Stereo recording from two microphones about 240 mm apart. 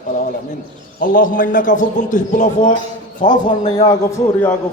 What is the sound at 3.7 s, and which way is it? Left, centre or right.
Speech, centre.